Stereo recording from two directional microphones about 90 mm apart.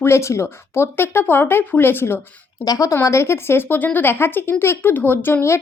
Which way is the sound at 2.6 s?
40° left (ahead or behind).